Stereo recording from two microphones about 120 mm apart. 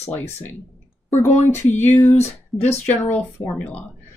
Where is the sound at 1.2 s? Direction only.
75° left (ahead or behind).